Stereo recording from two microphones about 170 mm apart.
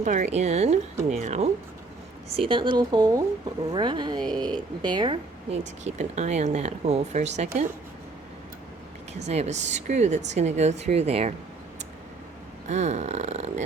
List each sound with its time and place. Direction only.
0.0 s speech: 45° right (ahead or behind)
9.1 s speech: 40° right (ahead or behind)
12.6 s speech: 40° right (ahead or behind)